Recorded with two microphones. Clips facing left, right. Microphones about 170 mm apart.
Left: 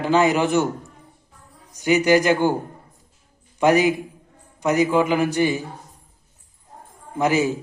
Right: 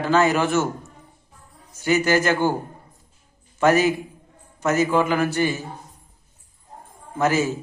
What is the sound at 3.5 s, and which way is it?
A man's voice, 15° left (ahead or behind).